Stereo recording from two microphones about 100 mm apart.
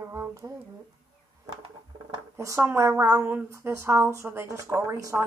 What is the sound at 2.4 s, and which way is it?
A woman's voice, 30° right (ahead or behind).